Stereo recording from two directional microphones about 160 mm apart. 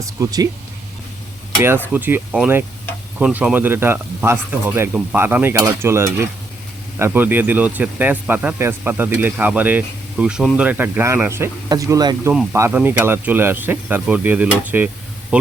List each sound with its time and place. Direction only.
0.0 s speech: 20° right (ahead or behind)
1.9 s speech: 10° right (ahead or behind)